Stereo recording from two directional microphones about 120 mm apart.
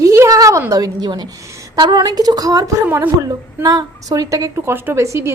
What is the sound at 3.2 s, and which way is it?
A woman's voice, 30° right (ahead or behind).